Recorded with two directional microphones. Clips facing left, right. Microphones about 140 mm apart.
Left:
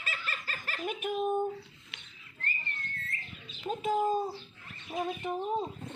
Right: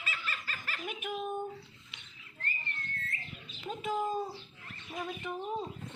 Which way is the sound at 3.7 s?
40° left (ahead or behind).